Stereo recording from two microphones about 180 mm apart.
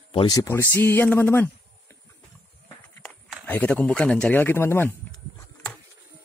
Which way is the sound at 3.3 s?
5° left (ahead or behind).